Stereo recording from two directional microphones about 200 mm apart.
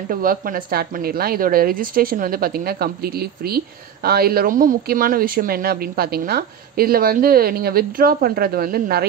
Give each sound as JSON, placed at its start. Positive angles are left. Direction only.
{"t": 0.1, "sound": "speech", "side_deg": -45}